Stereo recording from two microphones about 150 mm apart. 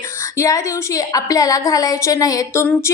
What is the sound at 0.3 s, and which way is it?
A woman's voice, 20° left (ahead or behind).